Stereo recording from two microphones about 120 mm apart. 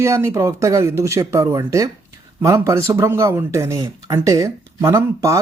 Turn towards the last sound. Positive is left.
turn(degrees=-25)  # may be behind; listen again after turning